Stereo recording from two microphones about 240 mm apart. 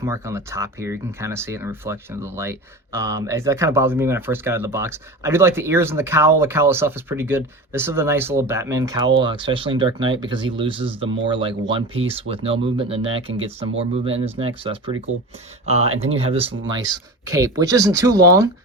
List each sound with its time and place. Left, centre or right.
0.0 s speech: centre
15.1 s speech: right
15.6 s speech: right